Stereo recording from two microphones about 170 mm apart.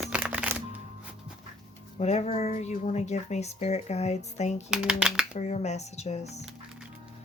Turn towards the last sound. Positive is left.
turn(degrees=40)  # may be behind; listen again after turning